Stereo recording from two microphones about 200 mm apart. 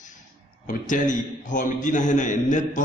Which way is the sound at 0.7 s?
40° left (ahead or behind).